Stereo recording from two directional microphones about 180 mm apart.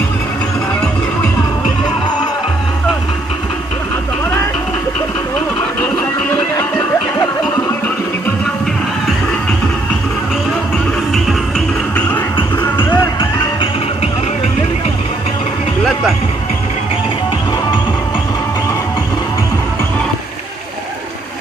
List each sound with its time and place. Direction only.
11.2 s music: 5° left (ahead or behind)
12.4 s music: 25° left (ahead or behind)